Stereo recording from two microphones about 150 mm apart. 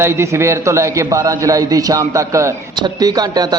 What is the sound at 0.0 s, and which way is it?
A man's voice, 15° right (ahead or behind).